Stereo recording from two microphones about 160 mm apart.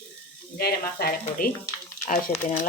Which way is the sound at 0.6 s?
80° left.